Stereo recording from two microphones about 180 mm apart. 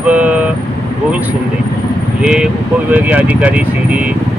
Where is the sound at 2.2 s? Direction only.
5° right (ahead or behind).